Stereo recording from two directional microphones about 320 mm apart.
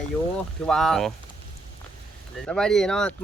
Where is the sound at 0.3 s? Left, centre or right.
Centre.